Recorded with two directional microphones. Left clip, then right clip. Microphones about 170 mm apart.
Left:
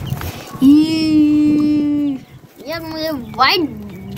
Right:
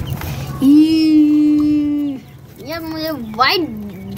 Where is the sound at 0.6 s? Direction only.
65° left (ahead or behind).